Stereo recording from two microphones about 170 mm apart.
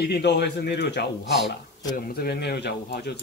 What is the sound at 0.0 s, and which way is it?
Speech, 85° left.